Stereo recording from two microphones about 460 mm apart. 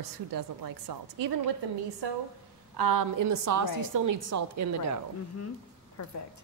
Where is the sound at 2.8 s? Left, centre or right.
Right.